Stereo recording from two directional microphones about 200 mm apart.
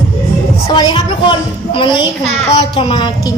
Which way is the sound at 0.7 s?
20° left (ahead or behind).